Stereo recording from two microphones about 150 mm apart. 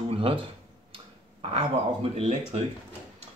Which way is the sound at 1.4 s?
40° right (ahead or behind).